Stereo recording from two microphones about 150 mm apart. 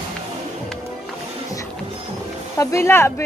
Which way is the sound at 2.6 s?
20° left (ahead or behind).